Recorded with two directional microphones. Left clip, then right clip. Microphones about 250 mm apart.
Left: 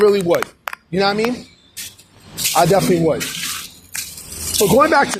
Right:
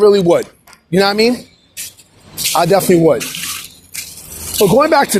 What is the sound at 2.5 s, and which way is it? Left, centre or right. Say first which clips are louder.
Speech: right 3 dB; right.